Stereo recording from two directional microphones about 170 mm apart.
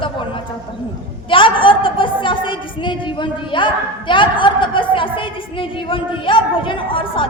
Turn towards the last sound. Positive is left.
turn(degrees=30)  # may be behind; listen again after turning